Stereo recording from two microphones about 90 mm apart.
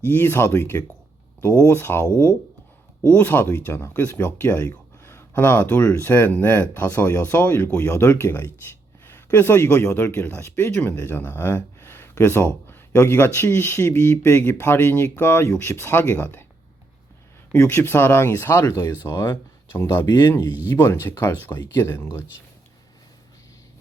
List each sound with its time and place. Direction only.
0.0 s speech: 25° left (ahead or behind)
17.5 s speech: 30° left (ahead or behind)